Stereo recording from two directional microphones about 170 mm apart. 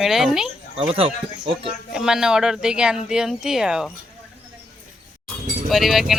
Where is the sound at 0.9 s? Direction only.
35° right (ahead or behind).